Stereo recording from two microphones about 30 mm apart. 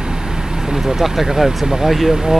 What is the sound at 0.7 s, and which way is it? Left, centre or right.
Speech, right.